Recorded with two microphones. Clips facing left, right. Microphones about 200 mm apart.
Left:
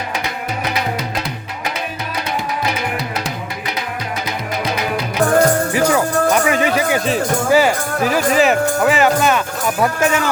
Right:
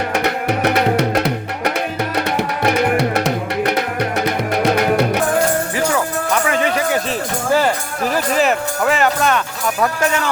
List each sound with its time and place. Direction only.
0.6 s music: 65° right (ahead or behind)
4.6 s music: 65° right (ahead or behind)
5.7 s music: 15° left (ahead or behind)